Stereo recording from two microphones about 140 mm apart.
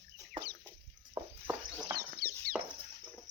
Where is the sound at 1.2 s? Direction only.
15° right (ahead or behind).